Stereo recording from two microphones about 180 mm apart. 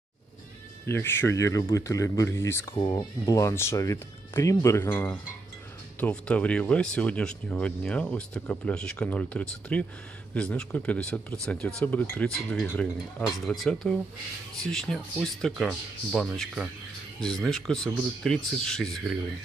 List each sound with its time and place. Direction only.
0.8 s speech: 15° left (ahead or behind)